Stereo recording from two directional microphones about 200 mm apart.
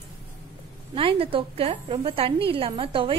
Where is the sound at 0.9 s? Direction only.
25° right (ahead or behind).